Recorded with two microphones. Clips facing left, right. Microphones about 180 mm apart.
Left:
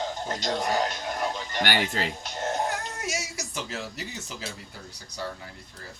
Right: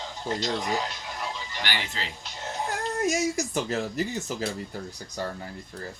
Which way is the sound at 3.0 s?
45° right (ahead or behind).